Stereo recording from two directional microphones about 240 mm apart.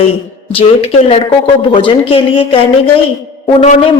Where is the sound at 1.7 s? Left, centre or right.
Left.